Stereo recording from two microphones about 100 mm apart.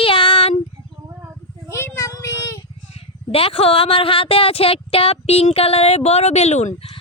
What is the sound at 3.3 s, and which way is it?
Speech, 75° left (ahead or behind).